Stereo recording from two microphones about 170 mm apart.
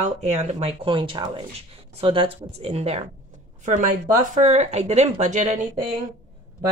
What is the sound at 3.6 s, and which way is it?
Speech, 50° right (ahead or behind).